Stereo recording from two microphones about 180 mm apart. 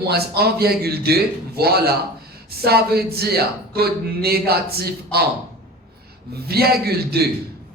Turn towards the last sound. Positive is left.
turn(degrees=-60)  # may be behind; listen again after turning